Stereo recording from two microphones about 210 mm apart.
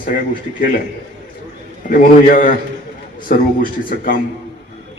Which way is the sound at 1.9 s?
40° left (ahead or behind).